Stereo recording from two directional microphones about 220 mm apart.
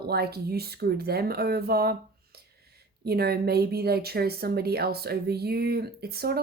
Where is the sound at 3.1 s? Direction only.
45° right (ahead or behind).